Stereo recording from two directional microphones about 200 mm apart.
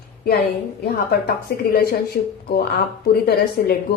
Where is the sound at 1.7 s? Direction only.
50° left (ahead or behind).